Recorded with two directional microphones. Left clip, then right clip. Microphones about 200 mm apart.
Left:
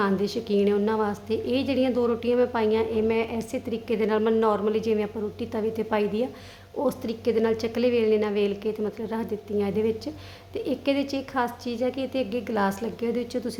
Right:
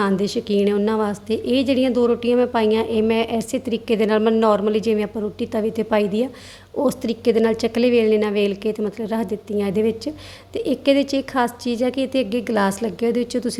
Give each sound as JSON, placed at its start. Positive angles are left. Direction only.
{"t": 0.0, "sound": "a woman's voice", "side_deg": -25}